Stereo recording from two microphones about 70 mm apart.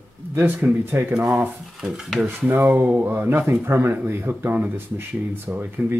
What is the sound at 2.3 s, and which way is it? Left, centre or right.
Speech, right.